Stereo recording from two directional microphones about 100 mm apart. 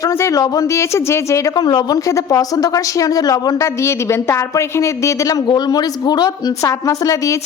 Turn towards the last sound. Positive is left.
turn(degrees=30)  # may be behind; listen again after turning